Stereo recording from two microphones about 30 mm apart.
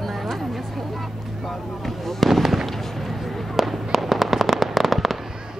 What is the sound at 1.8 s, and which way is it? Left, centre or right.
Fireworks, centre.